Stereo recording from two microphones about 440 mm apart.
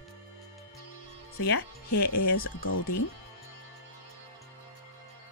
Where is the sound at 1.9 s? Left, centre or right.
Left.